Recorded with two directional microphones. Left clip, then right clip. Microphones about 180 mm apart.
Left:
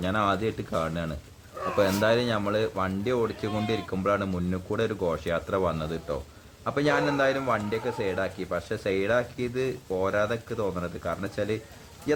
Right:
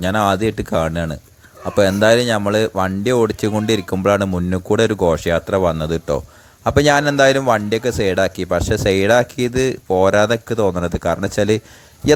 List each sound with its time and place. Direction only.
0.0 s a man's voice: 45° right (ahead or behind)